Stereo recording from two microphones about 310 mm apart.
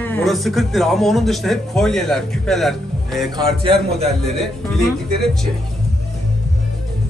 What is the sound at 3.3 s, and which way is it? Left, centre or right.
Speech, centre.